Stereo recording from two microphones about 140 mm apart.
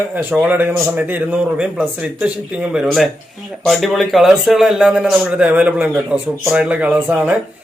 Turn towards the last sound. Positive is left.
turn(degrees=-10)  # may be behind; listen again after turning